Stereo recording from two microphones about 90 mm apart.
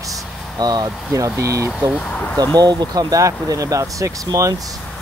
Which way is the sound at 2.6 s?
45° right (ahead or behind).